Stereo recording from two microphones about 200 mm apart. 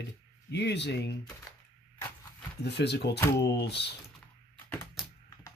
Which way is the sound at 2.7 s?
55° left (ahead or behind).